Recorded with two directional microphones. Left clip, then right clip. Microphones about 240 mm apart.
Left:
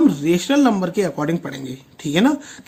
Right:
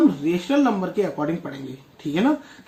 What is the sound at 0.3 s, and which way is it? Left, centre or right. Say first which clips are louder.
Speech: left 4 dB; left.